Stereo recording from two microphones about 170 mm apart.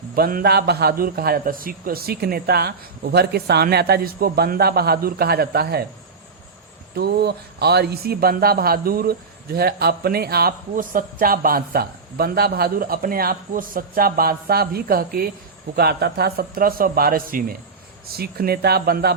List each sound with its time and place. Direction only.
0.2 s speech: 60° right (ahead or behind)
6.9 s speech: 75° right (ahead or behind)